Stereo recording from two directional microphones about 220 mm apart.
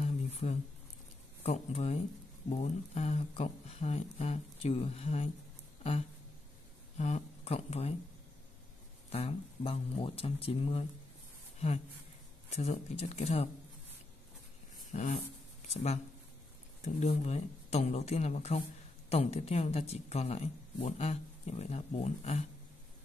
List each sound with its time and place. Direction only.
0.0 s a sound: 30° left (ahead or behind)
1.4 s speech: 30° left (ahead or behind)
7.0 s speech: 30° left (ahead or behind)
9.1 s speech: 25° left (ahead or behind)
14.9 s a sound: 35° left (ahead or behind)
15.7 s speech: 30° left (ahead or behind)